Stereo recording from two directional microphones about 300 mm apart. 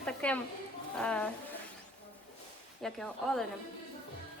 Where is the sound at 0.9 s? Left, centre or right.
Centre.